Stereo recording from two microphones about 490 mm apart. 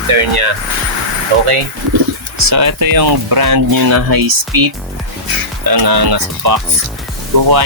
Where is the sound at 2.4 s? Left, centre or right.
Right.